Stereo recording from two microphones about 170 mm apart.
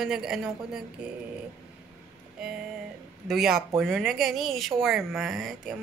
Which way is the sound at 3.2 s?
Centre (ahead or behind).